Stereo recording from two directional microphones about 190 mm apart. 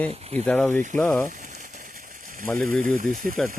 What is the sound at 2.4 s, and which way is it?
Speech, centre (ahead or behind).